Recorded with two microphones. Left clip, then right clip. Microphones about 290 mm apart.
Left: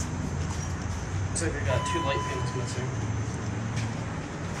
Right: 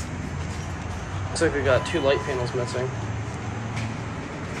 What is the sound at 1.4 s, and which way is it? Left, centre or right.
Speech, centre.